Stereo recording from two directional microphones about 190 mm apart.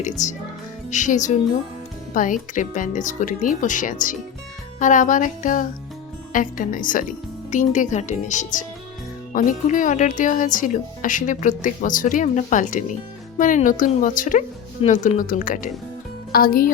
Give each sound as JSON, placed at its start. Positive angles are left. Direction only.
{"t": 0.0, "sound": "speech", "side_deg": 40}